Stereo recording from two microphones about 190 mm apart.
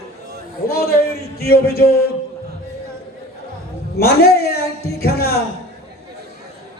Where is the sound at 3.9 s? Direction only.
55° left (ahead or behind).